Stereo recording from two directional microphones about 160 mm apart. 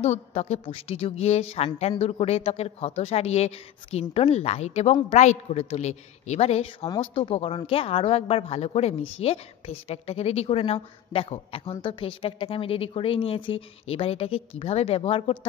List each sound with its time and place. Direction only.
0.0 s a woman's voice: 45° left (ahead or behind)